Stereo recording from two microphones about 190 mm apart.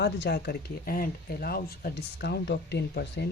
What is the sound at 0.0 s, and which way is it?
Speech, 60° left (ahead or behind).